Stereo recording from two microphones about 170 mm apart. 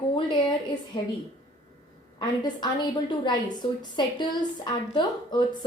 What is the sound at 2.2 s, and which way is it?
A woman's voice, 25° left (ahead or behind).